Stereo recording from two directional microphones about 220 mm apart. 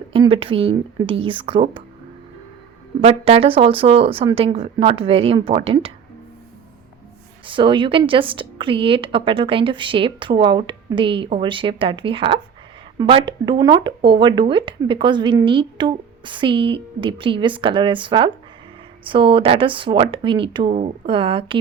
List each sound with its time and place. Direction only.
0.1 s speech: 25° right (ahead or behind)
3.0 s speech: 25° right (ahead or behind)
7.4 s speech: 20° right (ahead or behind)